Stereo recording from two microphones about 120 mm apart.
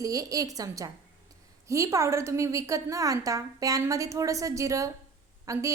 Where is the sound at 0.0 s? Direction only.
30° right (ahead or behind).